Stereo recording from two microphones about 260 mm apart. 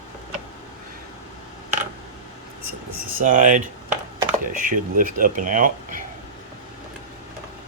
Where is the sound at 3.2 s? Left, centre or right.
Right.